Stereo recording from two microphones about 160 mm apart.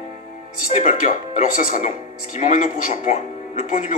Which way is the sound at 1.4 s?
50° left (ahead or behind).